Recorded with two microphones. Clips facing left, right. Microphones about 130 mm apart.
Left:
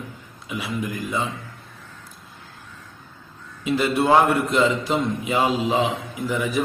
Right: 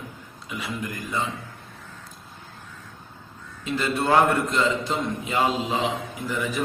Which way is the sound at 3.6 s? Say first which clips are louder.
Left 5 dB; 10° left (ahead or behind).